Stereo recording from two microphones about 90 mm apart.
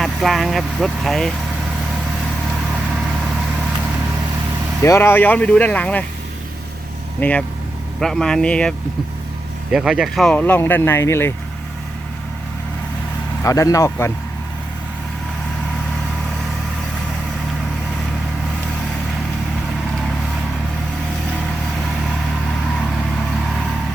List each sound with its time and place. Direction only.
0.0 s speech: centre (ahead or behind)
4.8 s speech: 25° left (ahead or behind)
7.2 s speech: 15° left (ahead or behind)
7.9 s speech: 5° left (ahead or behind)
9.7 s speech: 10° right (ahead or behind)
10.3 s speech: 20° left (ahead or behind)
13.4 s speech: 40° left (ahead or behind)